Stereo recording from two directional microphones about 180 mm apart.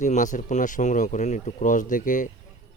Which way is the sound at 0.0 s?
45° left (ahead or behind).